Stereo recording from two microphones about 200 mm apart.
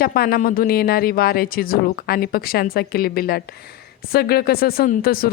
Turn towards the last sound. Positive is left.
turn(degrees=45)  # may be behind; listen again after turning